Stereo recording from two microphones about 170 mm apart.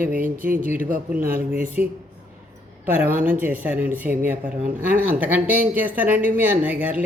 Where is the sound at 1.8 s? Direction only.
10° right (ahead or behind).